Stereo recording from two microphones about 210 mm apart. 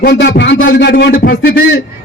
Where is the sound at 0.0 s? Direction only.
50° left (ahead or behind).